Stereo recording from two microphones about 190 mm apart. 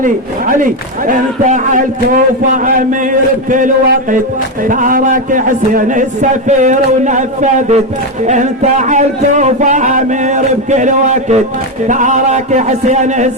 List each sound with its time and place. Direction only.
0.0 s a man's voice: 45° right (ahead or behind)
4.7 s a man's voice: 45° right (ahead or behind)